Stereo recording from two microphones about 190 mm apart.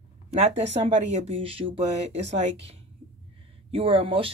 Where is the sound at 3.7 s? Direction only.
30° right (ahead or behind).